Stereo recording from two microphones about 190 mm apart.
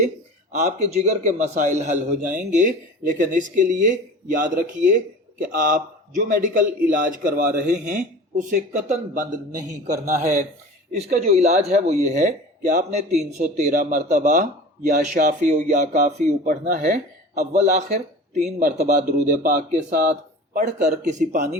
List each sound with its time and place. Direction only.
0.5 s a man's voice: 35° right (ahead or behind)